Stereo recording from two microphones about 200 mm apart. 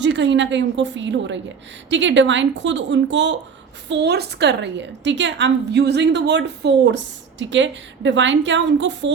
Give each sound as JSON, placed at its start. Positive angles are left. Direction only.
{"t": 0.0, "sound": "a woman's voice", "side_deg": -65}